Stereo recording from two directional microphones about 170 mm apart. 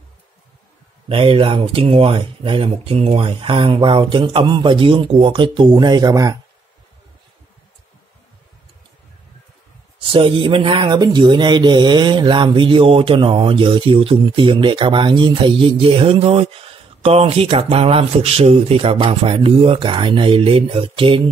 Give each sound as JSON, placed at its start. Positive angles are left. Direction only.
{"t": 1.0, "sound": "speech", "side_deg": -30}
{"t": 10.0, "sound": "speech", "side_deg": -30}